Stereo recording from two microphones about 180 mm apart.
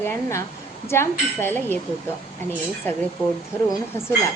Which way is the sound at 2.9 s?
10° left (ahead or behind).